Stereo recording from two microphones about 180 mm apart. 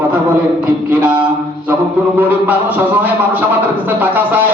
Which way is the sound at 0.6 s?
10° right (ahead or behind).